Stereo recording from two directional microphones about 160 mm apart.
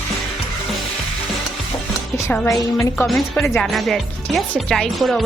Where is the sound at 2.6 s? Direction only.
20° left (ahead or behind).